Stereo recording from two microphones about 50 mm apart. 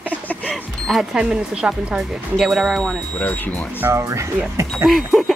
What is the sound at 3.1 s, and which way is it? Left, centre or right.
Speech, left.